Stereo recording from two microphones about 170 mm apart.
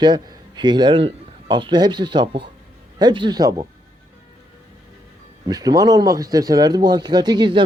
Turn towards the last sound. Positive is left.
turn(degrees=-25)  # may be behind; listen again after turning